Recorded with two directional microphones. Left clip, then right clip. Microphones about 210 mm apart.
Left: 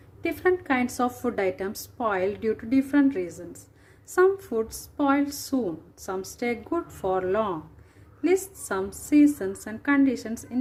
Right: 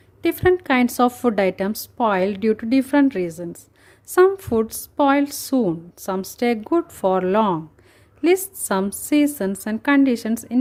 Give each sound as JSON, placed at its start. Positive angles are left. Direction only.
{"t": 0.2, "sound": "a woman's voice", "side_deg": -45}